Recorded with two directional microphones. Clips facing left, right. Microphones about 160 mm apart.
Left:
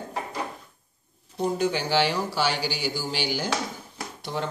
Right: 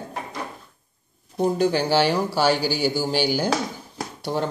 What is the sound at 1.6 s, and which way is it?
Speech, 40° right (ahead or behind).